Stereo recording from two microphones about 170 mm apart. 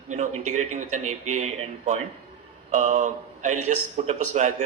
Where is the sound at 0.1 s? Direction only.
45° right (ahead or behind).